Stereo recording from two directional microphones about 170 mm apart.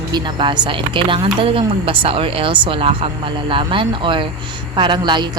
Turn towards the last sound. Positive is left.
turn(degrees=-25)  # may be behind; listen again after turning